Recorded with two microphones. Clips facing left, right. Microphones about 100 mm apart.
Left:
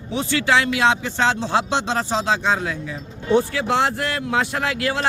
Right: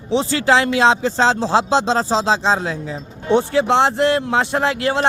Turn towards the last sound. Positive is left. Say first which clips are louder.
# right 5 dB
turn(degrees=-30)  # may be behind; listen again after turning